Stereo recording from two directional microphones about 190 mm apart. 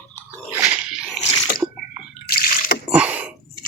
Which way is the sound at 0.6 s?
10° right (ahead or behind).